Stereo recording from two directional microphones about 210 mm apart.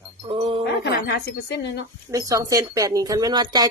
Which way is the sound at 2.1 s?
15° right (ahead or behind).